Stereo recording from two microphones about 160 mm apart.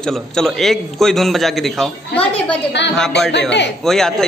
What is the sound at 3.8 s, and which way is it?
Speech, 5° left (ahead or behind).